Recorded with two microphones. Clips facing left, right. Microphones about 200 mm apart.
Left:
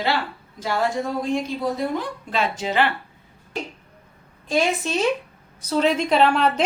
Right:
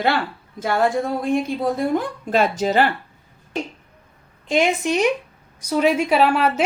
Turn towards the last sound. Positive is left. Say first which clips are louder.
# right 1 dB
turn(degrees=-5)  # may be behind; listen again after turning